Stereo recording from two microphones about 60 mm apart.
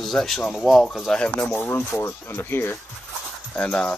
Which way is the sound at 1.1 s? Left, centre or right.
Centre.